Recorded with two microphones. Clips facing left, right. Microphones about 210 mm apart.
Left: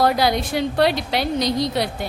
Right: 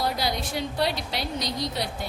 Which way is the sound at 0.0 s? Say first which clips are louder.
Left 9 dB; 80° left.